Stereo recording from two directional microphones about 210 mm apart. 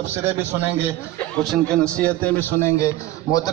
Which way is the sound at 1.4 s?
5° left (ahead or behind).